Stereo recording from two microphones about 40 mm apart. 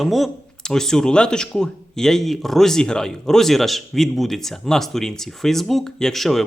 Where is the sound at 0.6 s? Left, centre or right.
Centre.